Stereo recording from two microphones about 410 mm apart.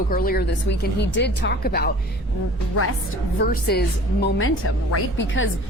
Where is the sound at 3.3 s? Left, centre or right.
Left.